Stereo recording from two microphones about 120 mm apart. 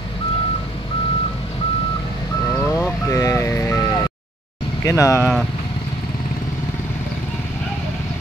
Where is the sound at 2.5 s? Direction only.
20° left (ahead or behind).